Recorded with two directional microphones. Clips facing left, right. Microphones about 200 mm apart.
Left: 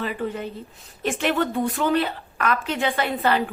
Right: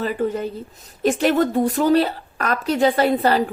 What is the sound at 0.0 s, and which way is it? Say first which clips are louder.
A woman's voice: right 5 dB; 40° right (ahead or behind).